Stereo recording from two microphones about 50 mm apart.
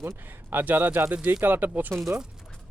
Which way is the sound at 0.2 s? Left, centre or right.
Right.